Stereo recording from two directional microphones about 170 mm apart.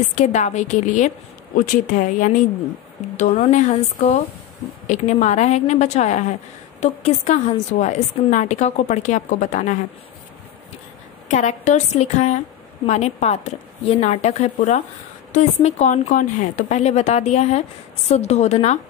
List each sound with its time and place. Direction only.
0.1 s a woman's voice: 45° left (ahead or behind)
11.2 s a woman's voice: 45° left (ahead or behind)